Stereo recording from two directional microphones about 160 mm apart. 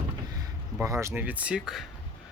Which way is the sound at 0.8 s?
20° right (ahead or behind).